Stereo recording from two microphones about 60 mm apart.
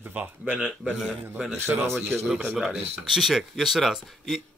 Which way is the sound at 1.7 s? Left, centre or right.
Right.